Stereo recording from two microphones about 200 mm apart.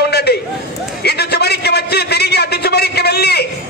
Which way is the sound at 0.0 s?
55° left (ahead or behind).